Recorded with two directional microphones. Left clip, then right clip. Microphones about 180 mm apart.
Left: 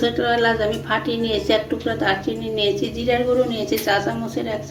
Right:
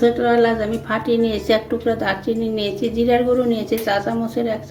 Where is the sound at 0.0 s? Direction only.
55° right (ahead or behind).